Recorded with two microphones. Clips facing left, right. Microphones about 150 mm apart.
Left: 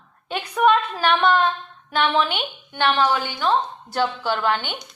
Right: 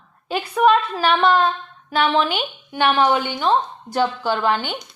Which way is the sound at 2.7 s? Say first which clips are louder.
Right 3 dB; 15° right (ahead or behind).